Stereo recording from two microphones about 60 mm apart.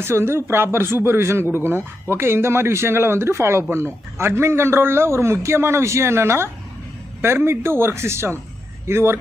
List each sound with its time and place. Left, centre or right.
0.0 s speech: right